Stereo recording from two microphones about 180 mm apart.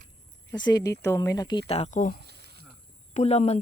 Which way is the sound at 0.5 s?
20° left (ahead or behind).